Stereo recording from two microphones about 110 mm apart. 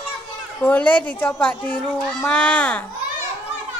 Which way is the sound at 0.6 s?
15° left (ahead or behind).